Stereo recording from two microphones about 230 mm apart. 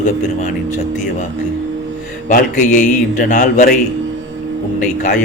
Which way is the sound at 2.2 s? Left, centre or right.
Left.